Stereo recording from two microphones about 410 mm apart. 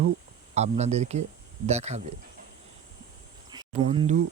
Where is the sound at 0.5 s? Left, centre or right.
Centre.